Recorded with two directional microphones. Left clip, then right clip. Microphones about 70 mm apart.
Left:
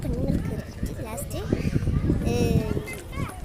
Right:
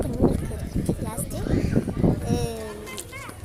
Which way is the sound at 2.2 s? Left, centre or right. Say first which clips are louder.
Left 2 dB; left.